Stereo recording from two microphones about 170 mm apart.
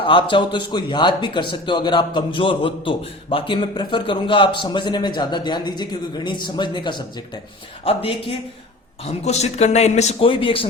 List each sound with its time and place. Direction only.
0.0 s a man's voice: 30° left (ahead or behind)